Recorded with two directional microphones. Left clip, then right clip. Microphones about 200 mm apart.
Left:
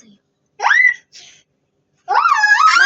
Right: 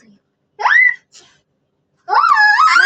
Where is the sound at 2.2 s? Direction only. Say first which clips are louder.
Right 2 dB; 20° right (ahead or behind).